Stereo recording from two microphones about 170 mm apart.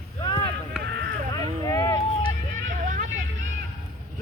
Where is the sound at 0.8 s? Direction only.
65° right (ahead or behind).